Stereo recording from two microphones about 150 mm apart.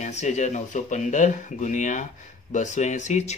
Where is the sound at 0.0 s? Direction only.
50° left (ahead or behind).